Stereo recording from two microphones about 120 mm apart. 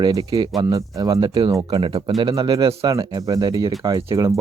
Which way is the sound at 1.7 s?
40° right (ahead or behind).